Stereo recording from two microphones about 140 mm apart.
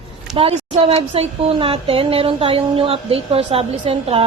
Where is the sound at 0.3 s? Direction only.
40° right (ahead or behind).